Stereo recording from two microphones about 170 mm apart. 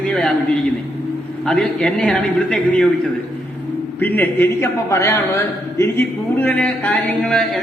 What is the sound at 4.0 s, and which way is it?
A man's voice, 10° left (ahead or behind).